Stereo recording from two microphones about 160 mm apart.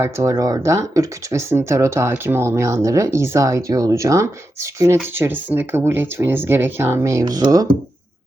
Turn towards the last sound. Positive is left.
turn(degrees=-25)  # may be behind; listen again after turning